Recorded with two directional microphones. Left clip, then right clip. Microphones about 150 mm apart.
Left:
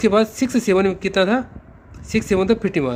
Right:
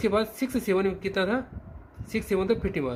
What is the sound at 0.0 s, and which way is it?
A man's voice, 85° left.